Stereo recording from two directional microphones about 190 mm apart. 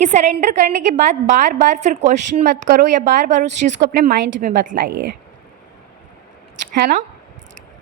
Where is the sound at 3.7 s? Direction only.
50° right (ahead or behind).